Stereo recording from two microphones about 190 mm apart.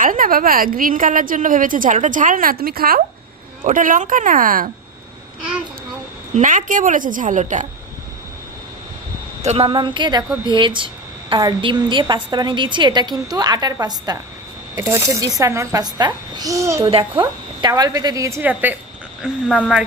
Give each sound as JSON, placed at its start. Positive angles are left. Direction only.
{"t": 0.0, "sound": "a woman's voice", "side_deg": -45}
{"t": 6.3, "sound": "a woman's voice", "side_deg": -40}
{"t": 9.4, "sound": "a woman's voice", "side_deg": -35}
{"t": 16.9, "sound": "speech", "side_deg": -25}